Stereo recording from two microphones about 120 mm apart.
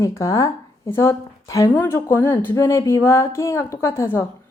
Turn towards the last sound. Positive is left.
turn(degrees=20)  # may be behind; listen again after turning